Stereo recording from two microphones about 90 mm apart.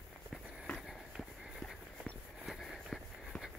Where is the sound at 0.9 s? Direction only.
Centre (ahead or behind).